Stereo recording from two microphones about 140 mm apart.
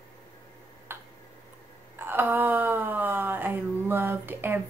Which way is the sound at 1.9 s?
15° right (ahead or behind).